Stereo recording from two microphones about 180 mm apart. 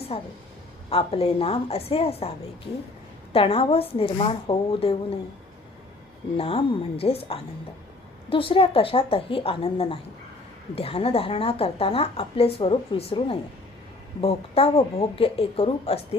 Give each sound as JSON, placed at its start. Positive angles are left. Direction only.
{"t": 0.1, "sound": "a woman's voice", "side_deg": 35}
{"t": 3.3, "sound": "a woman's voice", "side_deg": 30}
{"t": 6.3, "sound": "a woman's voice", "side_deg": 30}